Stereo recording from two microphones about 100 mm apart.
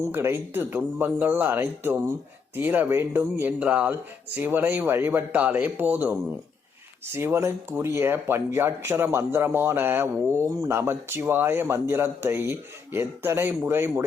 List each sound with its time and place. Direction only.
0.1 s a man's voice: 25° right (ahead or behind)
7.2 s a man's voice: 25° right (ahead or behind)